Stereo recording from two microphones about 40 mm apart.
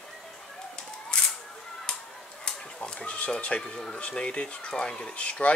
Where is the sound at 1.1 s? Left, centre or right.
Left.